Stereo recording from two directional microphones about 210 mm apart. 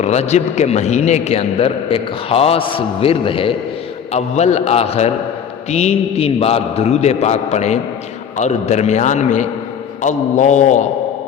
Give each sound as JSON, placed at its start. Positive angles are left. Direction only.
{"t": 0.0, "sound": "a man's voice", "side_deg": 30}